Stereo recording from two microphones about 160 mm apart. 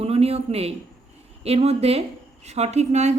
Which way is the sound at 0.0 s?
40° right (ahead or behind).